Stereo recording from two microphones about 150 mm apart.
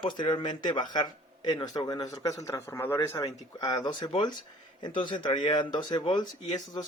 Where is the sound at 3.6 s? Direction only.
30° left (ahead or behind).